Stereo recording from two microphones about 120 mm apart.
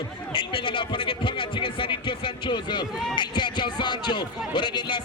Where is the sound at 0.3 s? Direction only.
45° left (ahead or behind).